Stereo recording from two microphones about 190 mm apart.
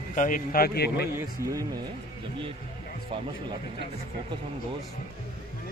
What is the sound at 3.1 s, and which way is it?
Speech, 25° right (ahead or behind).